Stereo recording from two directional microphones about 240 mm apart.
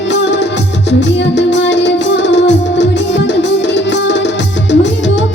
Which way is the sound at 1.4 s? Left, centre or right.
Left.